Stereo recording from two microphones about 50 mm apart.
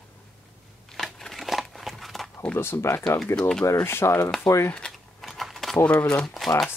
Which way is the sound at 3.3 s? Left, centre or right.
Centre.